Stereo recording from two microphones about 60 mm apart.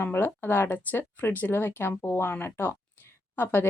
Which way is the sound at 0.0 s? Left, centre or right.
Left.